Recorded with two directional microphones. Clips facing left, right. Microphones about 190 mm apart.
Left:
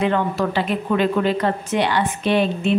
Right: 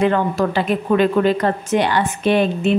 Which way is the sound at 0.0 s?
45° right (ahead or behind).